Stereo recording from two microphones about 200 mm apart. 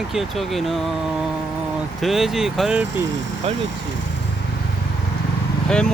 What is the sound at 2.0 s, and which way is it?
Speech, centre (ahead or behind).